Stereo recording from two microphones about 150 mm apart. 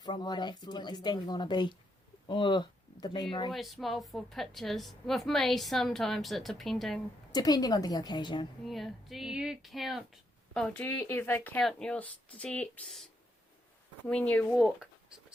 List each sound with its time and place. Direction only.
0.0 s speech: 30° left (ahead or behind)
3.5 s a woman's voice: centre (ahead or behind)
7.3 s speech: 25° left (ahead or behind)
8.6 s a woman's voice: centre (ahead or behind)
10.8 s speech: 15° left (ahead or behind)
14.1 s speech: 5° left (ahead or behind)
14.5 s a woman's voice: 5° right (ahead or behind)